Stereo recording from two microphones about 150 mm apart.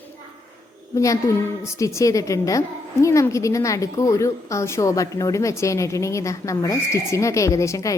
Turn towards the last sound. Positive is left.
turn(degrees=20)  # may be behind; listen again after turning